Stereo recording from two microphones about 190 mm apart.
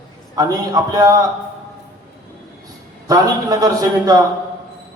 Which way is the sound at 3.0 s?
20° right (ahead or behind).